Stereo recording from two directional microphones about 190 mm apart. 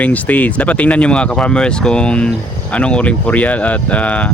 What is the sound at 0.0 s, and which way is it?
Speech, 10° left (ahead or behind).